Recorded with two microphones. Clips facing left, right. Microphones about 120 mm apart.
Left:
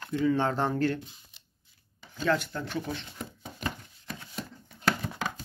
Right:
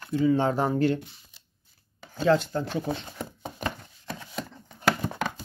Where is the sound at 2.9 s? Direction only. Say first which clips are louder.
Right 5 dB; 55° right (ahead or behind).